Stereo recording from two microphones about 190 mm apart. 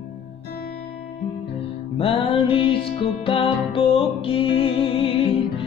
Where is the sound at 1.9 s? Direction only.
30° left (ahead or behind).